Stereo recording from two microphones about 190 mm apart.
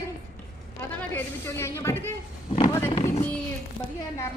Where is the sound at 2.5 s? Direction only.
25° left (ahead or behind).